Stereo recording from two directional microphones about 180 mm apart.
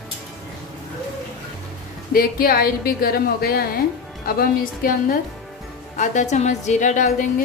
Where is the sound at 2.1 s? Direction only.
55° left (ahead or behind).